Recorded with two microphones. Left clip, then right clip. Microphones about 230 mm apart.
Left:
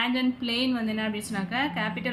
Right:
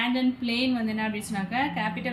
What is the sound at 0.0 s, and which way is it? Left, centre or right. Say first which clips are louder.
A woman's voice: even; centre.